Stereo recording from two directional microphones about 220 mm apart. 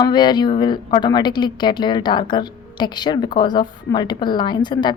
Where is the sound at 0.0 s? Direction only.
20° left (ahead or behind).